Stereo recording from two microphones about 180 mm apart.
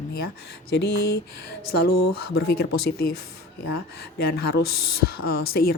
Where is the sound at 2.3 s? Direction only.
60° left (ahead or behind).